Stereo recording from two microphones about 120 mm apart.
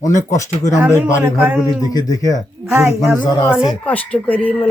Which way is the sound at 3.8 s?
10° left (ahead or behind).